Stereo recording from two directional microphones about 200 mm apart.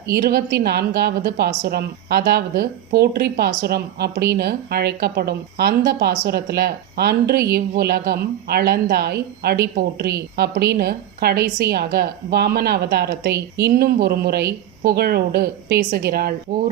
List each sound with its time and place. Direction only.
0.1 s a woman's voice: 50° right (ahead or behind)